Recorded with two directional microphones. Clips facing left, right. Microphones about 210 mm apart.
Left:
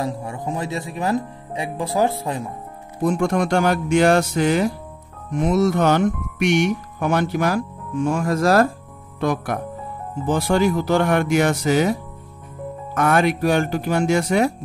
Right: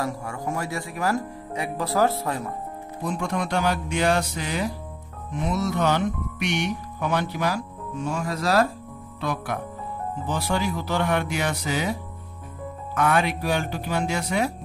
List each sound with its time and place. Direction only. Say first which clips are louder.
0.0 s speech: left 3 dB; 20° left (ahead or behind)
3.0 s speech: left 8 dB; 45° left (ahead or behind)